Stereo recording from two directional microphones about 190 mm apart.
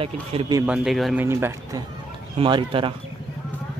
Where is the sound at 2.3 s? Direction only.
25° right (ahead or behind).